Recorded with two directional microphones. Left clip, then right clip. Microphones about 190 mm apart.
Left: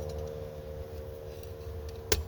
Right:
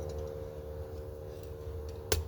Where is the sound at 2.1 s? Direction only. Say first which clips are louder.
Left 3 dB; 20° left (ahead or behind).